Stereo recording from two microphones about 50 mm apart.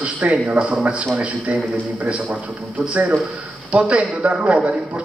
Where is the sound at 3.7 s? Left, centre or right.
Right.